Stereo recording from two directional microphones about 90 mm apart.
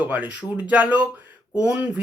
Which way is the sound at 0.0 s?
20° right (ahead or behind).